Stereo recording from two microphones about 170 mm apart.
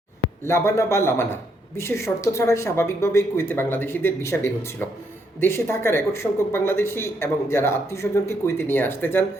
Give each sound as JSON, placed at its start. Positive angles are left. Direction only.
{"t": 0.4, "sound": "speech", "side_deg": 15}